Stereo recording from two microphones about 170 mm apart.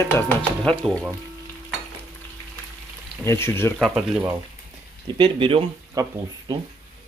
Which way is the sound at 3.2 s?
15° left (ahead or behind).